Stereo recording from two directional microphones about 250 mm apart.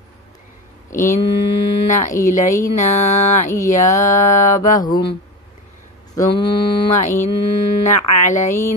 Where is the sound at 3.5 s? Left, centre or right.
Centre.